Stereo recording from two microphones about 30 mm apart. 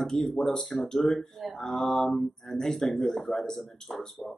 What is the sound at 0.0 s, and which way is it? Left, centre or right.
Speech, centre.